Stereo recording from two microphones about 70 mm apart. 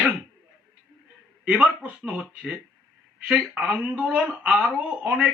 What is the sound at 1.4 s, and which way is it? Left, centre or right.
Speech, centre.